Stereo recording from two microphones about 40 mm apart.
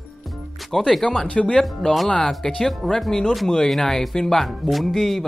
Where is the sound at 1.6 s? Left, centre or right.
Centre.